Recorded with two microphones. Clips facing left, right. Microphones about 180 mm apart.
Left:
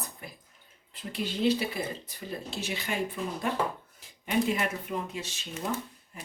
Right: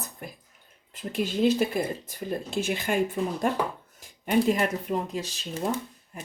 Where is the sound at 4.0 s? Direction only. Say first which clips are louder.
Right 5 dB; 45° right (ahead or behind).